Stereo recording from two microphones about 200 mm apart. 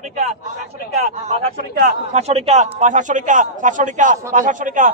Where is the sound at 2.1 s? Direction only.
35° right (ahead or behind).